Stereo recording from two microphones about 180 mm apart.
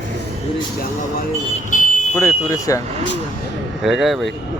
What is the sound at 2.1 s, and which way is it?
Speech, 15° left (ahead or behind).